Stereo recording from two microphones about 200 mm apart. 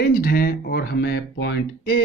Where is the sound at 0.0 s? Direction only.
50° left (ahead or behind).